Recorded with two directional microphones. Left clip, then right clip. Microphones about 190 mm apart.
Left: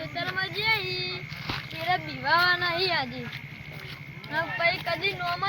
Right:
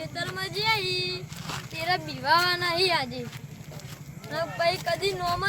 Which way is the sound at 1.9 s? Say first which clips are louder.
Right 1 dB; 35° right (ahead or behind).